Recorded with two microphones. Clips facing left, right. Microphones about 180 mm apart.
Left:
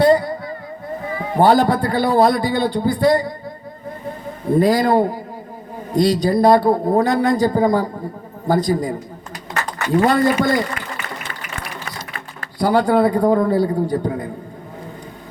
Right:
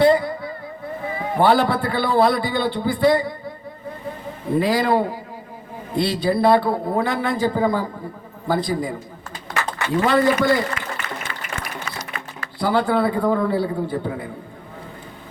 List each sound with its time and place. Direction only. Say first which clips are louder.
0.0 s a sound: left 2 dB; 40° left (ahead or behind)
1.4 s a man's voice: left 3 dB; 40° left (ahead or behind)
4.5 s a man's voice: left 4 dB; 45° left (ahead or behind)
9.9 s a man's voice: left 2 dB; 40° left (ahead or behind)
11.9 s a man's voice: even; 40° left (ahead or behind)